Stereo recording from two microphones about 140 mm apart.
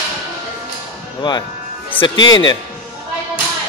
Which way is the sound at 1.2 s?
30° left (ahead or behind).